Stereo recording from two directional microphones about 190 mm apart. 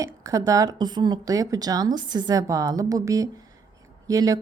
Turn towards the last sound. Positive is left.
turn(degrees=-20)  # may be behind; listen again after turning